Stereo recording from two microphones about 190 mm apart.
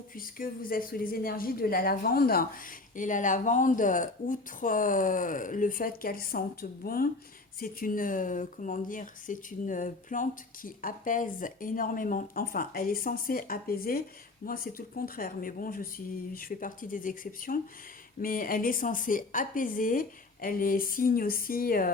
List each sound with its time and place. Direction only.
0.2 s speech: 45° left (ahead or behind)